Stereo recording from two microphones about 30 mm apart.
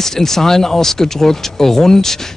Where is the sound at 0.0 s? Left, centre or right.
Centre.